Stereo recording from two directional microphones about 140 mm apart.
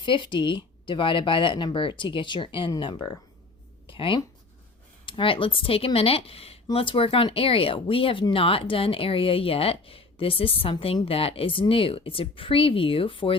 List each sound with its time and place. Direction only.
0.0 s speech: 35° left (ahead or behind)